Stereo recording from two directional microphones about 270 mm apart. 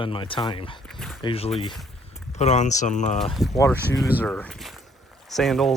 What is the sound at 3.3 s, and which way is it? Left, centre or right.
Speech, centre.